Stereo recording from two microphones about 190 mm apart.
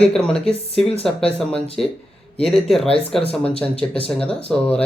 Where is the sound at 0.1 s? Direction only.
5° left (ahead or behind).